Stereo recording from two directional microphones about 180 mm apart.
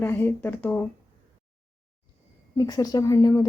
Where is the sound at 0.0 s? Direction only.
10° left (ahead or behind).